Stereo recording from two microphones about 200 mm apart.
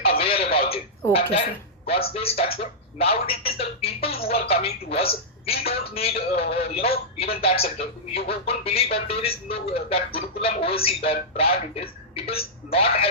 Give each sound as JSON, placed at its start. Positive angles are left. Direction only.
{"t": 0.0, "sound": "telephone", "side_deg": 30}
{"t": 1.1, "sound": "speech", "side_deg": 30}